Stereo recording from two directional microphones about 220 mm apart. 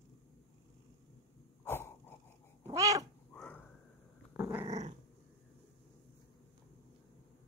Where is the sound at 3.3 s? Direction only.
5° left (ahead or behind).